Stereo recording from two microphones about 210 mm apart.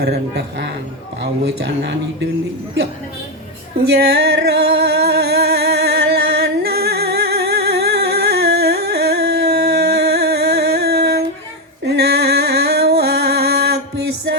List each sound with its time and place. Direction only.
0.0 s speech: 50° right (ahead or behind)
3.9 s singing: 50° right (ahead or behind)
11.9 s music: 50° right (ahead or behind)